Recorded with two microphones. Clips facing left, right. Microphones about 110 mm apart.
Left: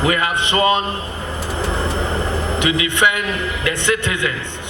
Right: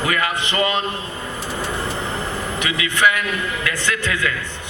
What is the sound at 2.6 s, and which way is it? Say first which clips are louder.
A man's voice: left 1 dB; 25° left (ahead or behind).